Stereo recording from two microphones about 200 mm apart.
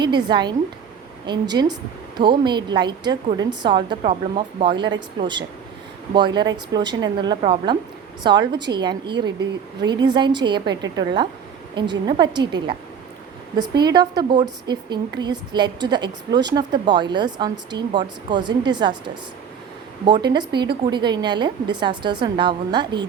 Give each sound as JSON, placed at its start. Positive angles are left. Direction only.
{"t": 0.0, "sound": "speech", "side_deg": -20}
{"t": 1.5, "sound": "speech", "side_deg": -20}